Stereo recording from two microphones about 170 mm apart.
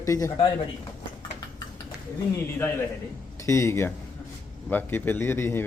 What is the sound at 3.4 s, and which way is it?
A man's voice, 15° left (ahead or behind).